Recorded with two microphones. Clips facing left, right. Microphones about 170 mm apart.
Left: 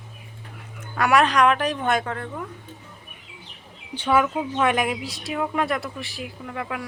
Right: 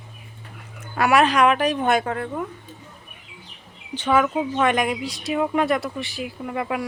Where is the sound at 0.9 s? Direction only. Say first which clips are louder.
Right 1 dB; 5° right (ahead or behind).